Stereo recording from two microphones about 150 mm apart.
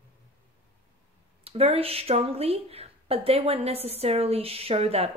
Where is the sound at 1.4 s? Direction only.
40° right (ahead or behind).